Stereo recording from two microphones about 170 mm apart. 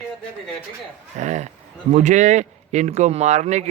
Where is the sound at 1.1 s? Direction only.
45° right (ahead or behind).